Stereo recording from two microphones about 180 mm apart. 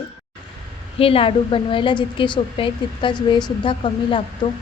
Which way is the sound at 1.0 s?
30° left (ahead or behind).